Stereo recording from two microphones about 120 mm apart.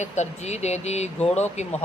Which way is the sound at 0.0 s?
75° left (ahead or behind).